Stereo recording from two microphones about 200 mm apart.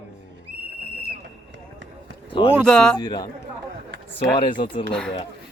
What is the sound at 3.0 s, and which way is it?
Speech, 20° left (ahead or behind).